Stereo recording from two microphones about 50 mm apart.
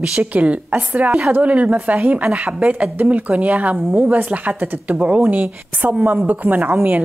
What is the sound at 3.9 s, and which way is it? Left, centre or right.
Speech, right.